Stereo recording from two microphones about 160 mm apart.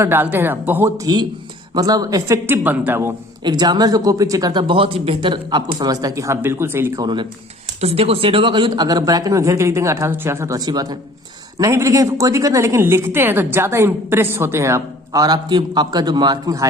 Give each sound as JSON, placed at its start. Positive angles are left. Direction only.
{"t": 0.0, "sound": "a woman's voice", "side_deg": -15}
{"t": 3.4, "sound": "a woman's voice", "side_deg": -25}
{"t": 7.8, "sound": "a woman's voice", "side_deg": -40}